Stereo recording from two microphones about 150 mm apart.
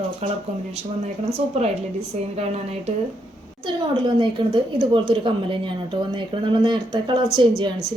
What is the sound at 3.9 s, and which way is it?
A woman's voice, 30° right (ahead or behind).